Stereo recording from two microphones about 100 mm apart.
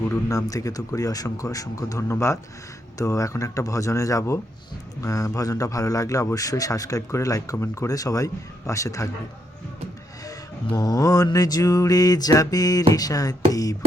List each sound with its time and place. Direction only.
0.3 s a man's voice: 35° left (ahead or behind)
10.7 s a man's voice: 40° left (ahead or behind)